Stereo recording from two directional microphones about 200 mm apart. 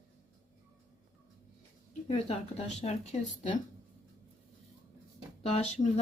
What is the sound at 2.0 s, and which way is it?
Speech, 30° left (ahead or behind).